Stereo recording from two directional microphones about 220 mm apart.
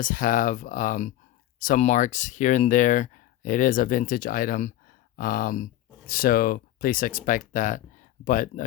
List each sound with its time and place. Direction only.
0.0 s speech: 35° left (ahead or behind)